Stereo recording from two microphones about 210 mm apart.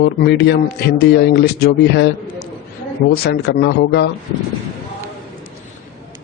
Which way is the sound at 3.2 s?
50° left (ahead or behind).